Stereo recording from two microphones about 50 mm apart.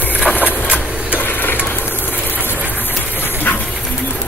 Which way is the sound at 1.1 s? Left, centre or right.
Left.